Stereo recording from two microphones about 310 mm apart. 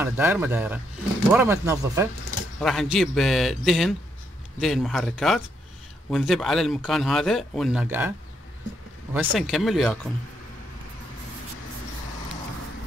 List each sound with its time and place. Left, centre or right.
0.0 s speech: centre
9.1 s speech: centre